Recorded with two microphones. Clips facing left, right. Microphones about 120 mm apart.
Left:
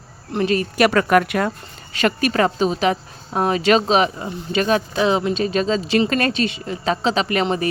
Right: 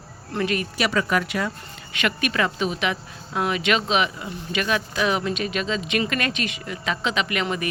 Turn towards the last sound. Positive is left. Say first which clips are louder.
# left 5 dB
turn(degrees=30)  # may be behind; listen again after turning